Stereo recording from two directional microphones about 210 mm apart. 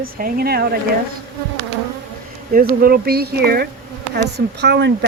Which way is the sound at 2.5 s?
45° right (ahead or behind).